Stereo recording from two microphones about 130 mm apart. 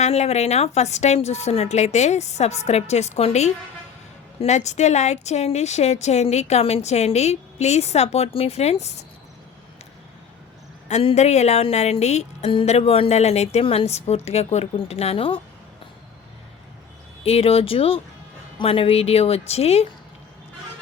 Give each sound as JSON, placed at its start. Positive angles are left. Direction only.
{"t": 0.0, "sound": "a woman's voice", "side_deg": 55}
{"t": 10.8, "sound": "a woman's voice", "side_deg": 55}
{"t": 17.2, "sound": "a woman's voice", "side_deg": 50}